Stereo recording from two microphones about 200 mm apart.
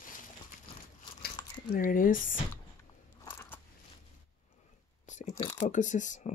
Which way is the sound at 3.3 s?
10° left (ahead or behind).